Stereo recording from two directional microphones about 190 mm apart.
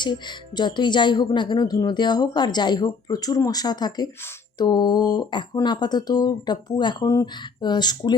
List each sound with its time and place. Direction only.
0.0 s speech: 25° left (ahead or behind)